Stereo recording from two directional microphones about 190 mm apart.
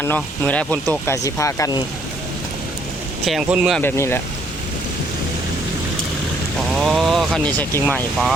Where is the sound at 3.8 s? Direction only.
10° left (ahead or behind).